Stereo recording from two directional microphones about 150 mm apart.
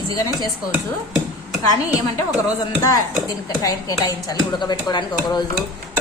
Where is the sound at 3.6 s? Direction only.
25° left (ahead or behind).